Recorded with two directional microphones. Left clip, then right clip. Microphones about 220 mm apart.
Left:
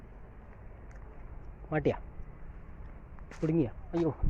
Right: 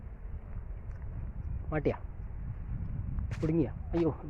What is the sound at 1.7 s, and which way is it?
Speech, 10° left (ahead or behind).